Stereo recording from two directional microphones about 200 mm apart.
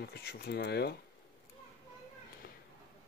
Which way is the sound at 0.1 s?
50° left (ahead or behind).